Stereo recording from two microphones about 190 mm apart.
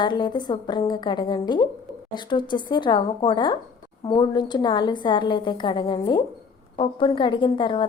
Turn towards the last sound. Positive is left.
turn(degrees=25)  # may be behind; listen again after turning